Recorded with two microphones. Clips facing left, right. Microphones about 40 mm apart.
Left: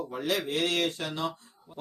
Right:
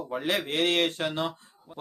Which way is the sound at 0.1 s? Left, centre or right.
Right.